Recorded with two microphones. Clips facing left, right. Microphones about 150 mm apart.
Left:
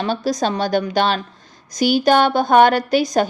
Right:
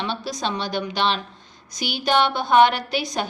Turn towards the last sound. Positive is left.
turn(degrees=45)  # may be behind; listen again after turning